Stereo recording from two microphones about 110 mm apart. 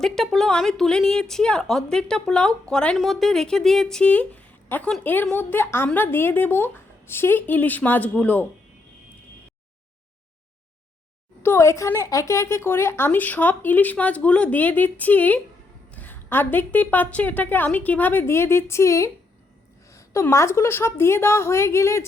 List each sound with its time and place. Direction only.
0.0 s a woman's voice: 5° left (ahead or behind)
11.4 s a woman's voice: 25° left (ahead or behind)
19.9 s a sound: 30° left (ahead or behind)
20.2 s a woman's voice: 25° left (ahead or behind)